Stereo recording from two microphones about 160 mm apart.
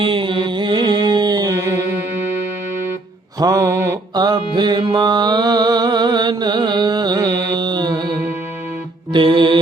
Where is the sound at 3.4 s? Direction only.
20° right (ahead or behind).